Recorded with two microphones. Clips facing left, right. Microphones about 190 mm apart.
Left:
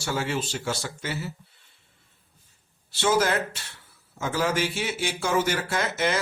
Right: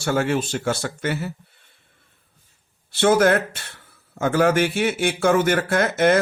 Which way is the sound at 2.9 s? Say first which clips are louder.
Right 7 dB; 55° right (ahead or behind).